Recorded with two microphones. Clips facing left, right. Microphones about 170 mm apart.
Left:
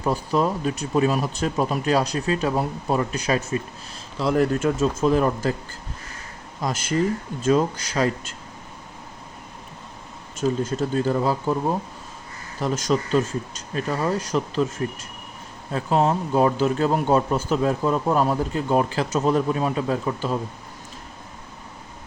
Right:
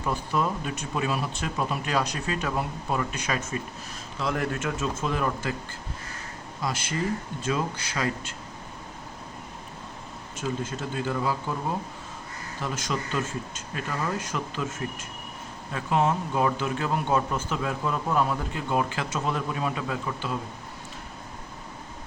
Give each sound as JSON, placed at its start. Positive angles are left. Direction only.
{"t": 0.0, "sound": "speech", "side_deg": 35}
{"t": 6.6, "sound": "speech", "side_deg": 45}
{"t": 10.6, "sound": "speech", "side_deg": 40}
{"t": 12.5, "sound": "speech", "side_deg": 40}
{"t": 15.7, "sound": "speech", "side_deg": 35}